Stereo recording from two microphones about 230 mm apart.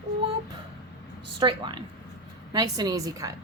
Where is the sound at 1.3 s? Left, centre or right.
Centre.